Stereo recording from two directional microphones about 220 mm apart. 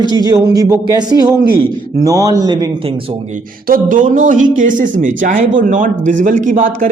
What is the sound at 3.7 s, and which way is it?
A man's voice, 40° right (ahead or behind).